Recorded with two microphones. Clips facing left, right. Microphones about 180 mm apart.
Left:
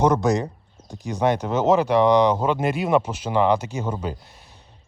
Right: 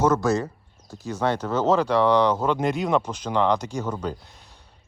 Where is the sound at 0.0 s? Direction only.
15° left (ahead or behind).